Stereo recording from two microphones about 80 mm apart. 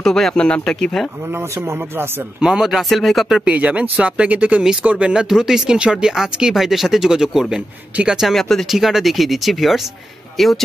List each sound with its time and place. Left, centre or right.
0.0 s speech: centre
1.3 s speech: right
2.4 s speech: centre
3.4 s speech: centre